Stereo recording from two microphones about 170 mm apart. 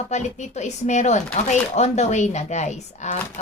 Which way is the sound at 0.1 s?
45° left (ahead or behind).